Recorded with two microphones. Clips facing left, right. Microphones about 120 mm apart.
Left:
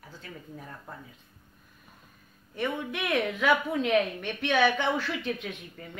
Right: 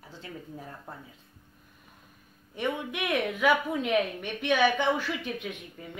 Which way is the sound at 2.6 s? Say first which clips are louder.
Even; 10° right (ahead or behind).